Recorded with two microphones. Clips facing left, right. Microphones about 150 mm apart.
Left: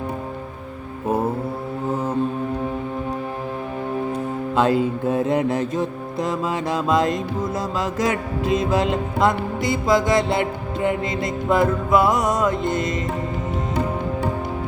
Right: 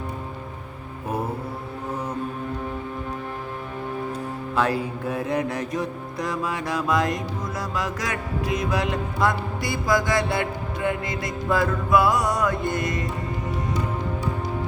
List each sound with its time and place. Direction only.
4.5 s music: 20° left (ahead or behind)